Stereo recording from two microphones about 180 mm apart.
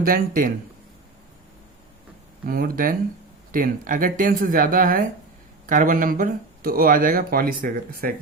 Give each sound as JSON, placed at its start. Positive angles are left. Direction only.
{"t": 0.0, "sound": "speech", "side_deg": -50}
{"t": 2.5, "sound": "speech", "side_deg": -55}